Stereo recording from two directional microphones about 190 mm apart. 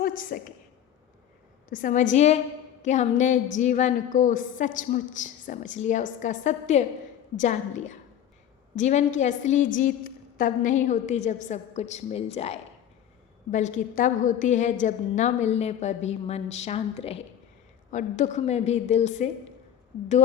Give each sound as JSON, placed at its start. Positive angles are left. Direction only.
{"t": 0.0, "sound": "a woman's voice", "side_deg": 45}
{"t": 1.7, "sound": "a woman's voice", "side_deg": 45}